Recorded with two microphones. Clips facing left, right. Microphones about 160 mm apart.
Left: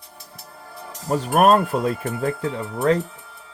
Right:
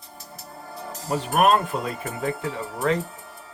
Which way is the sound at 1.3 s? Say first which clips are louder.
Left 4 dB; 40° left (ahead or behind).